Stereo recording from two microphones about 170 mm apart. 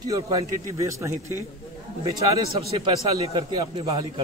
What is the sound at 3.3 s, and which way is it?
Speech, 25° right (ahead or behind).